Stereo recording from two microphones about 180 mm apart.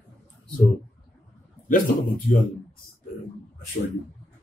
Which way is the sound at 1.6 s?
50° left (ahead or behind).